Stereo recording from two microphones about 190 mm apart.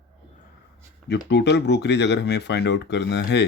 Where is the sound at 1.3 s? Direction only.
65° left (ahead or behind).